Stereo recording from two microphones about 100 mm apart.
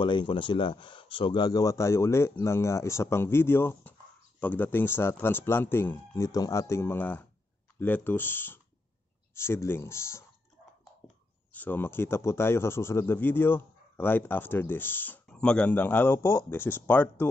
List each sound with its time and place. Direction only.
0.0 s speech: 55° left (ahead or behind)
1.4 s speech: 40° left (ahead or behind)
11.5 s speech: 15° left (ahead or behind)
15.3 s speech: 10° left (ahead or behind)